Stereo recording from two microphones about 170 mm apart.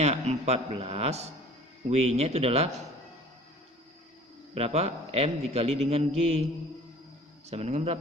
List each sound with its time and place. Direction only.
0.0 s a man's voice: 40° right (ahead or behind)
4.5 s a man's voice: 40° right (ahead or behind)
7.5 s a man's voice: 40° right (ahead or behind)